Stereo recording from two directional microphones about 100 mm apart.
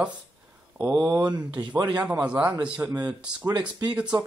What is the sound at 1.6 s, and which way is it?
Speech, 45° right (ahead or behind).